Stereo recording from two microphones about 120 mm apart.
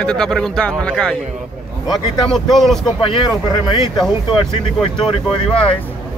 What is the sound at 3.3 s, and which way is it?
Speech, 35° left (ahead or behind).